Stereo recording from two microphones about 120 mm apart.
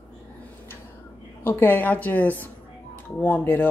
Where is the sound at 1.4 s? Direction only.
15° left (ahead or behind).